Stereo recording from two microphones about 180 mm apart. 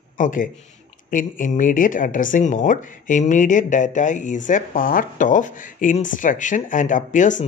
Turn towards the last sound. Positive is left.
turn(degrees=45)  # may be behind; listen again after turning